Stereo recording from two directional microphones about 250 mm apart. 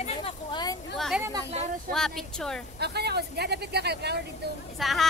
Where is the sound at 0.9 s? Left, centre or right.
Centre.